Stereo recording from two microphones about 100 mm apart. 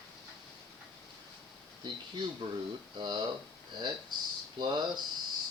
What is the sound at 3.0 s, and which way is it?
Speech, 45° right (ahead or behind).